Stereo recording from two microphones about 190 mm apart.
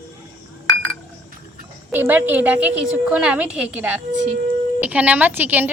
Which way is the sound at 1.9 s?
10° right (ahead or behind).